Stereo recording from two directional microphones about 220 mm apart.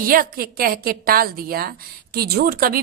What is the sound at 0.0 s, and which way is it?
A woman's voice, 40° right (ahead or behind).